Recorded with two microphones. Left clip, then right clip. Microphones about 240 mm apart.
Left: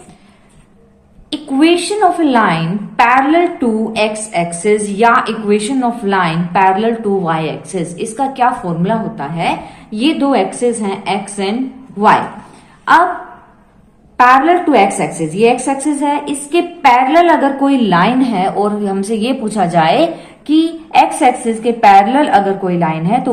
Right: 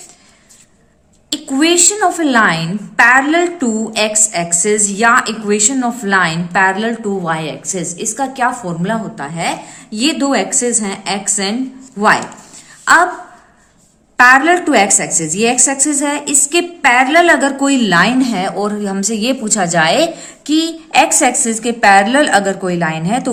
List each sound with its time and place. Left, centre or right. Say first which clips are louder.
1.3 s a woman's voice: left 2 dB; right
12.8 s a sound: even; right
14.2 s a woman's voice: even; right